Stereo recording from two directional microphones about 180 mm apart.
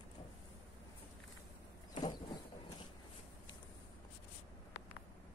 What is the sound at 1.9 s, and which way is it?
Vehicle, 25° left (ahead or behind).